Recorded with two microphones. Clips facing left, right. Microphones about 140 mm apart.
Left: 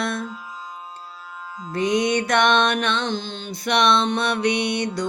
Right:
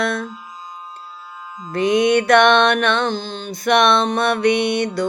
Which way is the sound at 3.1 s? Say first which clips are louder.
Right 3 dB; 40° right (ahead or behind).